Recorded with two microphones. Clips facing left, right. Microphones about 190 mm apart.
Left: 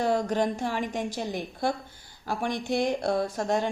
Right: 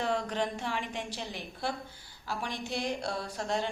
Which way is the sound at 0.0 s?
40° left (ahead or behind).